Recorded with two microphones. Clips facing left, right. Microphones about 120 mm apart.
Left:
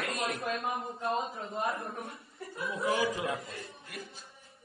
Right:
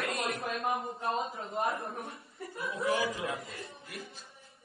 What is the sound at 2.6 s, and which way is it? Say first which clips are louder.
Speech: left 1 dB; 25° left (ahead or behind).